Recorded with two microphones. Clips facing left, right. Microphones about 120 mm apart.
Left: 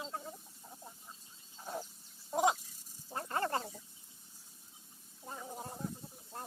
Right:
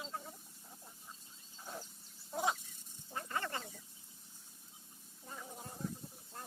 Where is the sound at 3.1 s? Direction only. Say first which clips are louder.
Left 5 dB; 40° left (ahead or behind).